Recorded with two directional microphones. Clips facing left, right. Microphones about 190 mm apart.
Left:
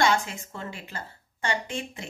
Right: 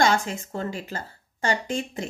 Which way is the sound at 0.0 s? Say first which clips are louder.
Right 2 dB; 40° right (ahead or behind).